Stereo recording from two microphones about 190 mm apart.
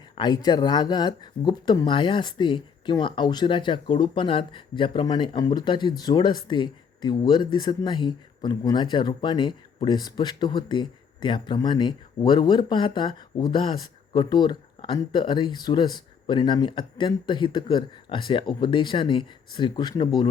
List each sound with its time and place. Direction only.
0.2 s speech: 20° left (ahead or behind)